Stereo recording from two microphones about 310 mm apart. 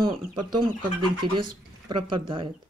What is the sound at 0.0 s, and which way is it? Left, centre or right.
Speech, centre.